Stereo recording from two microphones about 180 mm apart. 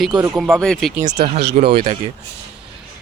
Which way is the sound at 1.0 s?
40° right (ahead or behind).